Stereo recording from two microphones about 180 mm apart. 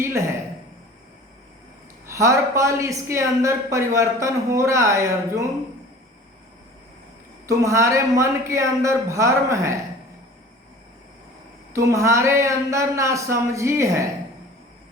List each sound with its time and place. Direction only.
0.0 s speech: 15° right (ahead or behind)
2.0 s speech: 15° right (ahead or behind)
7.4 s speech: 15° right (ahead or behind)
11.7 s speech: 15° right (ahead or behind)